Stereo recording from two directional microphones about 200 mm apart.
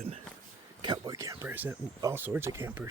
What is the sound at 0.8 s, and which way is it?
Speech, 20° right (ahead or behind).